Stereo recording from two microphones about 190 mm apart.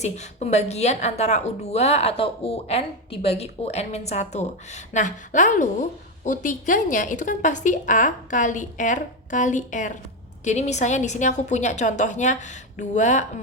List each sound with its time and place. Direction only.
0.0 s a woman's voice: 35° left (ahead or behind)